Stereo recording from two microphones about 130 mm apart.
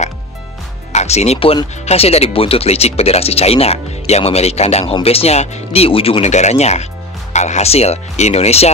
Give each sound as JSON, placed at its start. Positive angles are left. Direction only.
{"t": 0.9, "sound": "speech", "side_deg": 55}